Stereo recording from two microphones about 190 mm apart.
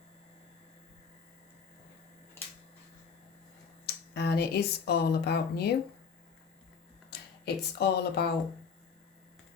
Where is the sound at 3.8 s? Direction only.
55° left (ahead or behind).